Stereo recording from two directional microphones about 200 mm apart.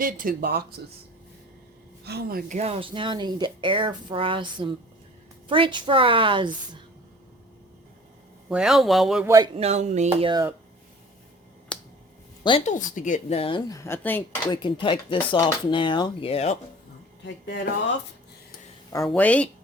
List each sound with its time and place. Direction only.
0.0 s speech: 45° right (ahead or behind)
2.0 s speech: 50° right (ahead or behind)
2.6 s speech: 30° right (ahead or behind)
8.4 s speech: 5° right (ahead or behind)
9.2 s speech: 15° right (ahead or behind)
9.6 s speech: 35° right (ahead or behind)
10.1 s speech: 25° right (ahead or behind)
11.7 s finger snapping: 5° left (ahead or behind)
12.4 s speech: 25° left (ahead or behind)
13.7 s speech: 15° left (ahead or behind)
14.5 s speech: 25° left (ahead or behind)
17.2 s speech: 65° left (ahead or behind)
19.0 s speech: 5° left (ahead or behind)